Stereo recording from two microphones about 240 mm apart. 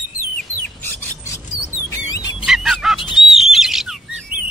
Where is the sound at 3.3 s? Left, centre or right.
Centre.